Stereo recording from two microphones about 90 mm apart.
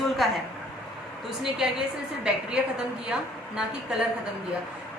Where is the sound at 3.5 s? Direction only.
10° right (ahead or behind).